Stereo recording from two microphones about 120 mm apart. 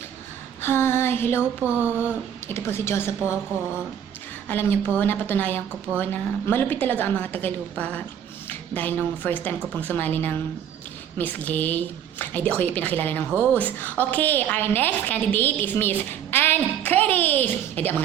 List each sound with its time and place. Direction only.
0.6 s female singing: 20° left (ahead or behind)
1.6 s a sound: 15° right (ahead or behind)
2.5 s female singing: 20° left (ahead or behind)
4.4 s a woman's voice: 15° left (ahead or behind)